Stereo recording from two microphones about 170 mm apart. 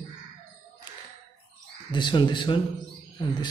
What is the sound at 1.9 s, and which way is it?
Speech, 25° left (ahead or behind).